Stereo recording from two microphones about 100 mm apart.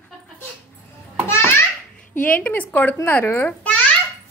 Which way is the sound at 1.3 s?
25° left (ahead or behind).